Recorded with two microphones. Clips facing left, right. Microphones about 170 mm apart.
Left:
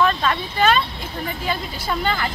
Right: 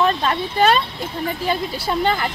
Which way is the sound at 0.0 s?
30° right (ahead or behind).